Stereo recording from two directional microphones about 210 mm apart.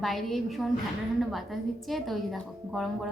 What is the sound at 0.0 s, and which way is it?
Speech, centre (ahead or behind).